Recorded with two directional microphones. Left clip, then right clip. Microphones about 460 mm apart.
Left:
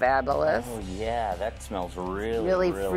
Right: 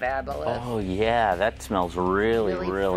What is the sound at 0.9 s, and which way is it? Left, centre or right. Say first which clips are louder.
Speech: right 7 dB; right.